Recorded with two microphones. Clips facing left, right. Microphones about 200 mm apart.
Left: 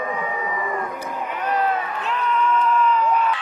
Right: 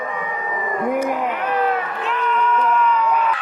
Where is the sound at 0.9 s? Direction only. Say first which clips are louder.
Right 9 dB; 80° right.